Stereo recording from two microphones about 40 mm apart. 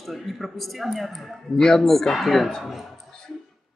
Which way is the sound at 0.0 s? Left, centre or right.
Centre.